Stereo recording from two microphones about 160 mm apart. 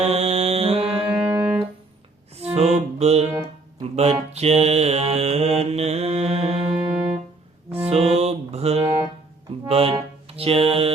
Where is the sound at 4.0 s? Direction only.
40° right (ahead or behind).